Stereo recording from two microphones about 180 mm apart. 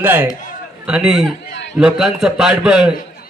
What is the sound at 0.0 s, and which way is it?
A man's voice, 10° right (ahead or behind).